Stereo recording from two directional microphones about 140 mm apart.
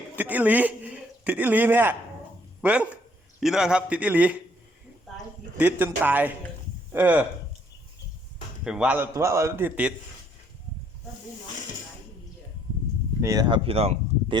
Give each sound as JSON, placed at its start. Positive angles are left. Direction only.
{"t": 0.2, "sound": "a man's voice", "side_deg": -10}
{"t": 5.5, "sound": "a man's voice", "side_deg": -15}
{"t": 8.6, "sound": "a man's voice", "side_deg": -5}
{"t": 9.1, "sound": "a man's voice", "side_deg": -20}
{"t": 13.2, "sound": "a man's voice", "side_deg": -25}
{"t": 13.5, "sound": "speech", "side_deg": -45}